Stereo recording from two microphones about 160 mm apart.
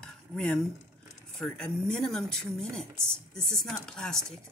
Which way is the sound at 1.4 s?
5° left (ahead or behind).